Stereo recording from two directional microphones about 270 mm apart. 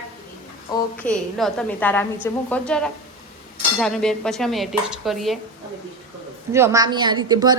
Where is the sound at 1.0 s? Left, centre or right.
Centre.